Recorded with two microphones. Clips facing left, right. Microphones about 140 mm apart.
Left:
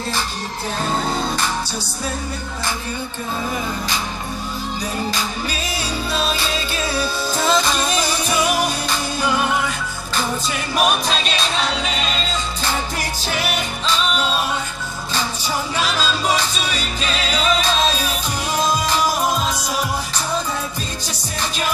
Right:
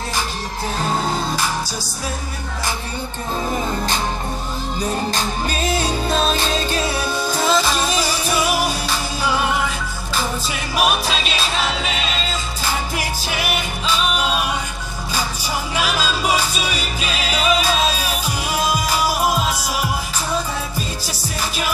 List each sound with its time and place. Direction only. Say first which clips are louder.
5.1 s music: right 2 dB; 45° right (ahead or behind)
7.4 s music: even; 5° right (ahead or behind)
10.8 s music: even; 5° right (ahead or behind)
13.2 s music: even; 10° right (ahead or behind)
15.7 s music: right 2 dB; 10° right (ahead or behind)
21.4 s music: left 1 dB; 10° right (ahead or behind)